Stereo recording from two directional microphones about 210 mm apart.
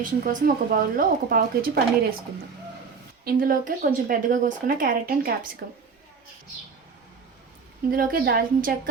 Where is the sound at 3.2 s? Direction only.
45° right (ahead or behind).